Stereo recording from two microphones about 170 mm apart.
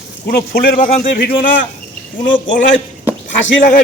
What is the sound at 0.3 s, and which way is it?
Speech, 65° left (ahead or behind).